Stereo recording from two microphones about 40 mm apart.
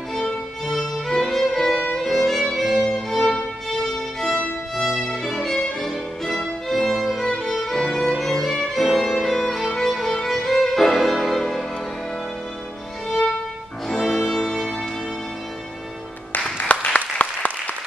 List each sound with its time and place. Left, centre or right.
0.7 s violin: centre
2.0 s music: centre
2.5 s violin: centre
4.8 s music: centre
5.3 s violin: centre
7.7 s music: centre
8.5 s violin: centre
9.8 s music: centre
14.0 s music: centre
16.5 s music: left